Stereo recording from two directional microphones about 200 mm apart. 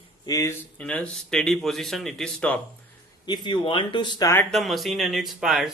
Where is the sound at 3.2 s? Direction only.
20° left (ahead or behind).